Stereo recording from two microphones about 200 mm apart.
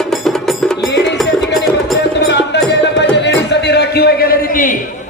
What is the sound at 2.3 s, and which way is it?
Music, 60° left (ahead or behind).